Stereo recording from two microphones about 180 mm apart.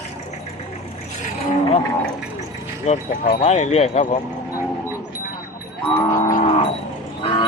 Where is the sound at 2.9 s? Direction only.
40° left (ahead or behind).